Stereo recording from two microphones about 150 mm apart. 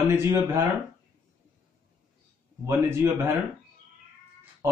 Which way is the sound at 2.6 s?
15° right (ahead or behind).